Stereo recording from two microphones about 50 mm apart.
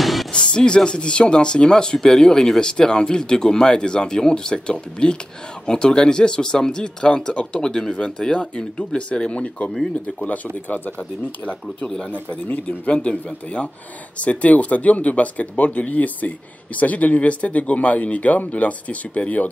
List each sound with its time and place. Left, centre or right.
0.0 s music: centre
0.3 s speech: centre
11.8 s speech: centre
12.1 s speech: left